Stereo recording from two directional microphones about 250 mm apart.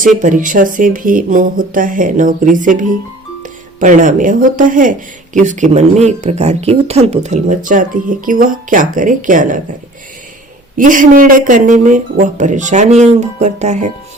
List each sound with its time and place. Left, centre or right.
0.2 s speech: right
10.8 s speech: right